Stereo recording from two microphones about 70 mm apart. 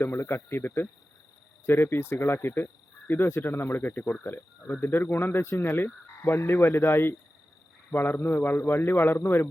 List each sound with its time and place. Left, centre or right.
0.0 s frog: left
7.9 s speech: left
8.2 s frog: left